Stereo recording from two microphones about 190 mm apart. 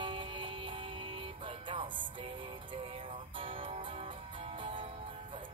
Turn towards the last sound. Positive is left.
turn(degrees=-25)  # may be behind; listen again after turning